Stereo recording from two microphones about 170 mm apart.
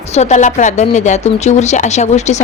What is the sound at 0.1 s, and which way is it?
Speech, 40° left (ahead or behind).